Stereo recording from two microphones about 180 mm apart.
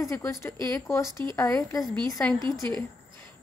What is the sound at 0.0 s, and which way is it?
A woman's voice, 15° left (ahead or behind).